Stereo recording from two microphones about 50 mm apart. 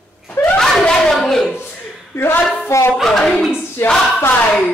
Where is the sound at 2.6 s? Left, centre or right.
Left.